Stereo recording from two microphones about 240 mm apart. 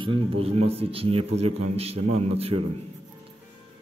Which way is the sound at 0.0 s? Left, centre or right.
Right.